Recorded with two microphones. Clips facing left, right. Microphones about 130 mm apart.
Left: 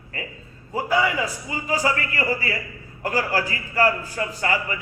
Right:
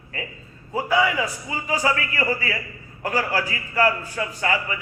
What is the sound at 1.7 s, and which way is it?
A man's voice, 35° left (ahead or behind).